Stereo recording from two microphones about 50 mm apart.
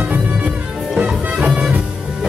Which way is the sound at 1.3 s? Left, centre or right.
Centre.